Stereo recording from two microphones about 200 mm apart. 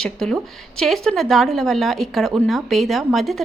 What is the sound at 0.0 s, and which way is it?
A woman's voice, 5° left (ahead or behind).